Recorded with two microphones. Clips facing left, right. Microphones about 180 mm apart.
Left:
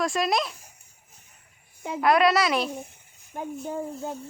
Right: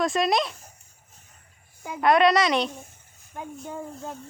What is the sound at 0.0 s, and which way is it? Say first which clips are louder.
Speech: right 2 dB; centre (ahead or behind).